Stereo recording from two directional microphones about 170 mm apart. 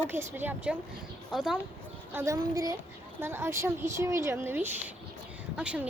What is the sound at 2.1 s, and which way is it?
A woman's voice, 20° right (ahead or behind).